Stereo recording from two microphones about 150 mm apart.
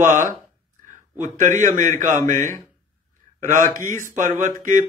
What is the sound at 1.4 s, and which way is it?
Speech, 60° right (ahead or behind).